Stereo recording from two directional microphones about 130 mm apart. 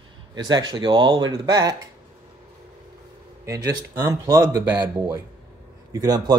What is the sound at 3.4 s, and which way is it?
Speech, 25° right (ahead or behind).